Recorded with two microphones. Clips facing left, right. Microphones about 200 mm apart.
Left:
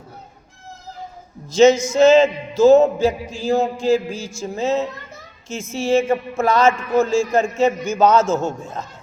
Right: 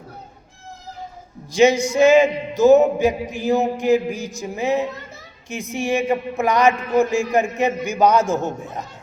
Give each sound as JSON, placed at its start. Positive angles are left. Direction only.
{"t": 1.5, "sound": "a man's voice", "side_deg": -15}